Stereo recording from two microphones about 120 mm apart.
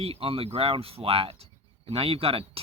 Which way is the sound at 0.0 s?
50° right (ahead or behind).